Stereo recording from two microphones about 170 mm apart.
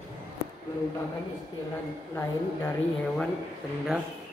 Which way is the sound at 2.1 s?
15° left (ahead or behind).